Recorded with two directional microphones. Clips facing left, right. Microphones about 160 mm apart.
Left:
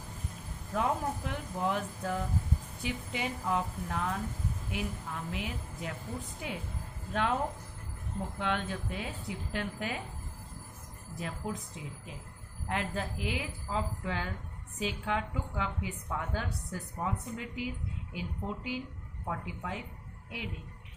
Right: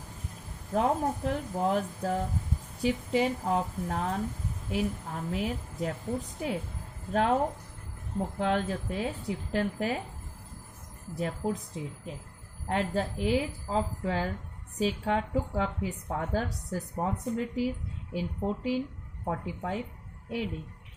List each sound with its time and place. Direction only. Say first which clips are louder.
0.7 s a woman's voice: right 4 dB; 35° right (ahead or behind)
7.1 s a woman's voice: right 5 dB; 35° right (ahead or behind)
8.4 s a woman's voice: right 5 dB; 35° right (ahead or behind)
11.1 s a woman's voice: right 6 dB; 35° right (ahead or behind)